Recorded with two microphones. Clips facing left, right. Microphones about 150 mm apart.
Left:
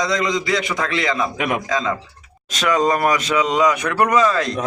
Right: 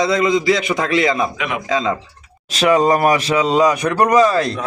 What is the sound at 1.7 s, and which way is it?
A man's voice, 25° right (ahead or behind).